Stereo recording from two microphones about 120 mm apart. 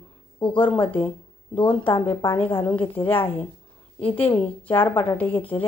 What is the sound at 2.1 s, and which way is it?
Speech, 20° left (ahead or behind).